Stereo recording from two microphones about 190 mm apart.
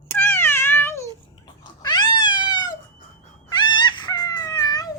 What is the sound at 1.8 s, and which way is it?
Cat, 25° left (ahead or behind).